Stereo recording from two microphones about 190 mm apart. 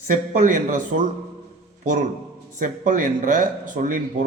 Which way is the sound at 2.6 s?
45° right (ahead or behind).